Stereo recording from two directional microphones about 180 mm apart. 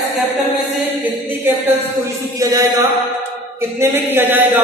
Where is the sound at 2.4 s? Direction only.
20° right (ahead or behind).